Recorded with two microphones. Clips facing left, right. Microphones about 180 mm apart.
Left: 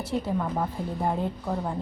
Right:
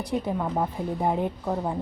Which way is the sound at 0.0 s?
15° right (ahead or behind).